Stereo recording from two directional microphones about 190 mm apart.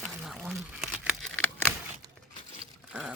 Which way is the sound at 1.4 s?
10° left (ahead or behind).